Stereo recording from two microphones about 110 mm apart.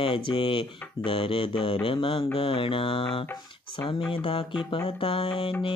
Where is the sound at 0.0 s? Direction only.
50° left (ahead or behind).